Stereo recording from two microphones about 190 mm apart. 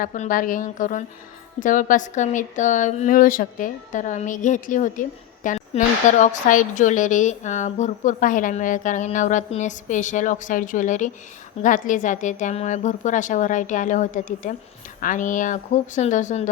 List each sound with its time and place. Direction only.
0.0 s a woman's voice: 45° left (ahead or behind)